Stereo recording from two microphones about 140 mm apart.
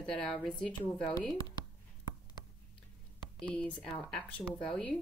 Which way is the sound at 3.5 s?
5° left (ahead or behind).